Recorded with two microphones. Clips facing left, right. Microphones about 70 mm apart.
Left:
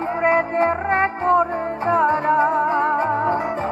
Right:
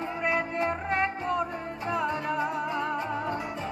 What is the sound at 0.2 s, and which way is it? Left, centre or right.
Music, left.